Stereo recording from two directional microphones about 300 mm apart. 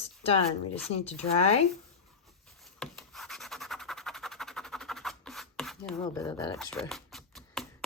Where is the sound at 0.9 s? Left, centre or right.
Left.